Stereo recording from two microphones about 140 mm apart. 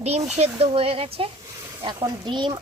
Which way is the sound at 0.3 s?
50° right (ahead or behind).